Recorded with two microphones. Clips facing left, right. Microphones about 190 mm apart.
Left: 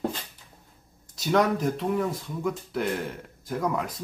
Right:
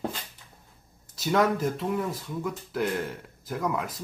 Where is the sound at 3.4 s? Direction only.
5° right (ahead or behind).